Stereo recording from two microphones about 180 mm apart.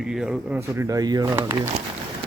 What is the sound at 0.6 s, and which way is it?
Speech, 15° right (ahead or behind).